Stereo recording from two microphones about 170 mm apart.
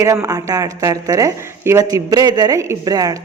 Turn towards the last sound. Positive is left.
turn(degrees=-20)  # may be behind; listen again after turning